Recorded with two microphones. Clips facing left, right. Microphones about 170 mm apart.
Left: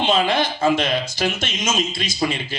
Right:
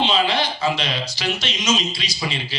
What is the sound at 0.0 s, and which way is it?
Speech, 50° left (ahead or behind).